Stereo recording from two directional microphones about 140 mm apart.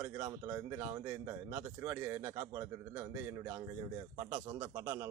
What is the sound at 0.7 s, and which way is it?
Speech, 25° right (ahead or behind).